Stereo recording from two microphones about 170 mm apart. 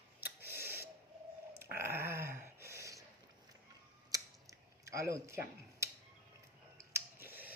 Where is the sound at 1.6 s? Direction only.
15° right (ahead or behind).